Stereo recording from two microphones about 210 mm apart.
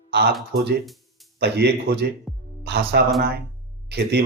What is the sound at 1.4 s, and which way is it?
Speech, 50° right (ahead or behind).